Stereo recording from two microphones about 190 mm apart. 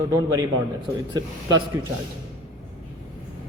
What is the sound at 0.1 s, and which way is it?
A man's voice, 20° right (ahead or behind).